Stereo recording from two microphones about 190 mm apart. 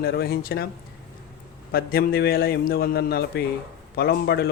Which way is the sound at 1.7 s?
55° left (ahead or behind).